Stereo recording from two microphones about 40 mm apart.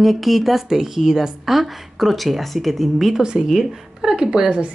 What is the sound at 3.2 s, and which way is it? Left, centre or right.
Speech, right.